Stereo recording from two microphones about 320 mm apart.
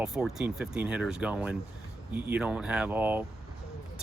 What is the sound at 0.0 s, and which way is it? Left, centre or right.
Speech, centre.